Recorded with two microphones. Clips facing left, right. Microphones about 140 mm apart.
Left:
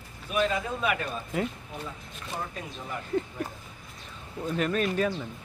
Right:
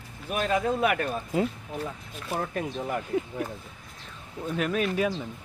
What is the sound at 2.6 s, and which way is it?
Speech, 60° right (ahead or behind).